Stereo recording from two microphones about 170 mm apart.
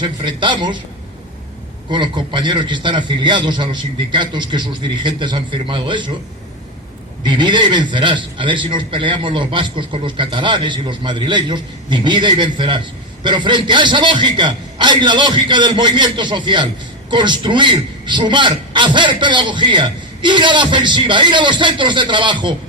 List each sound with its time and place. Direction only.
0.0 s a man's voice: 30° right (ahead or behind)
1.9 s a man's voice: 30° right (ahead or behind)
7.2 s a man's voice: 25° right (ahead or behind)